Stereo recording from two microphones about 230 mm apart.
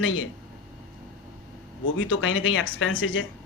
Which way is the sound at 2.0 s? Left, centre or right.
Left.